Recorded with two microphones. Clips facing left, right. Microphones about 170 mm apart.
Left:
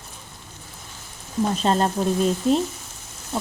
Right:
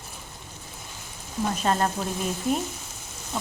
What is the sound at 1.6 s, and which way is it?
Speech, 25° left (ahead or behind).